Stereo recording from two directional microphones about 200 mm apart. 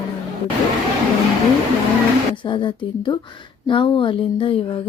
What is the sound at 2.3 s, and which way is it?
Speech, 25° left (ahead or behind).